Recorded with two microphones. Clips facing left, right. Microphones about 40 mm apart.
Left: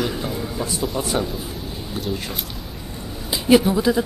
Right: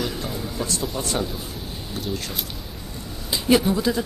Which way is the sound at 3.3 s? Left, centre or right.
Centre.